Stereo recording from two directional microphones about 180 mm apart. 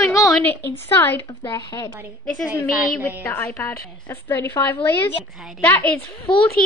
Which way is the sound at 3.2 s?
15° left (ahead or behind).